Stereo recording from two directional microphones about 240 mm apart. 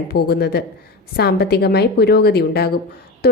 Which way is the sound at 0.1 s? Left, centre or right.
Left.